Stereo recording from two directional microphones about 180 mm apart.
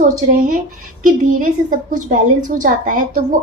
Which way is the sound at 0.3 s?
50° right (ahead or behind).